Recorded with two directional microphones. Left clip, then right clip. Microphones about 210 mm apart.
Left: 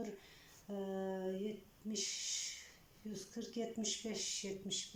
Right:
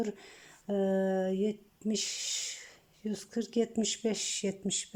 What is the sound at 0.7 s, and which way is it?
Speech, 45° right (ahead or behind).